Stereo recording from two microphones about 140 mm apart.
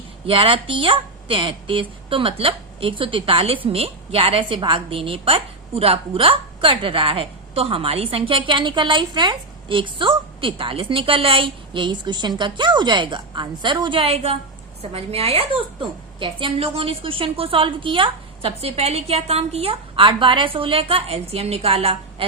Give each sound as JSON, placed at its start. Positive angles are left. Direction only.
{"t": 0.3, "sound": "a woman's voice", "side_deg": -40}